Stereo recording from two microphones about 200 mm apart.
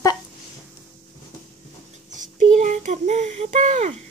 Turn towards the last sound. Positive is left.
turn(degrees=-35)  # may be behind; listen again after turning